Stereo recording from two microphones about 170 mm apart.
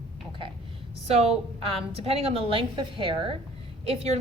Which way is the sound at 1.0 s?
35° right (ahead or behind).